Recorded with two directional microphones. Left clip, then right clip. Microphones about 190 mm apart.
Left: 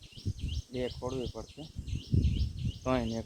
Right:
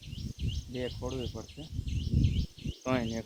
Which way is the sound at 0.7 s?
15° left (ahead or behind).